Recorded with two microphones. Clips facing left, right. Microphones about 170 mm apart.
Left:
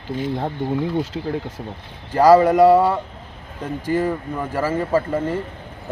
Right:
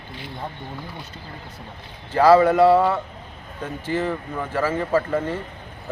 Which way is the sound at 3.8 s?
45° left (ahead or behind).